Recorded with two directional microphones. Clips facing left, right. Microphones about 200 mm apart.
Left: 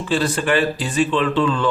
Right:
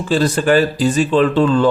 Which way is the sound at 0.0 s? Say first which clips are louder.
Right 4 dB; 40° right (ahead or behind).